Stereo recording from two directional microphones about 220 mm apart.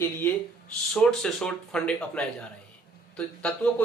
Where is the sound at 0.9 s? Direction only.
5° left (ahead or behind).